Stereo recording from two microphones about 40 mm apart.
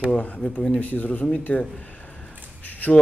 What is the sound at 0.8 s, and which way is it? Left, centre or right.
Speech, left.